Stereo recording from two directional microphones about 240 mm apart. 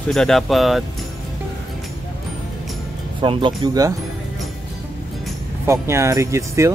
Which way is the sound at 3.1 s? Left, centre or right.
Right.